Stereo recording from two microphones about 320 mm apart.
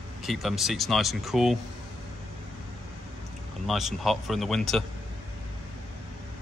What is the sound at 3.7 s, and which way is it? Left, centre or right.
A man's voice, centre.